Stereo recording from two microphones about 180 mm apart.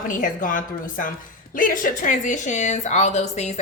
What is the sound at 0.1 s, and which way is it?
A woman's voice, 45° left (ahead or behind).